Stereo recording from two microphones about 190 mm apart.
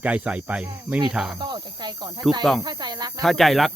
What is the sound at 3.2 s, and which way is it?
Speech, centre (ahead or behind).